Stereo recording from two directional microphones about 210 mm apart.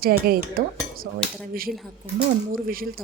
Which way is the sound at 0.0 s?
45° right (ahead or behind).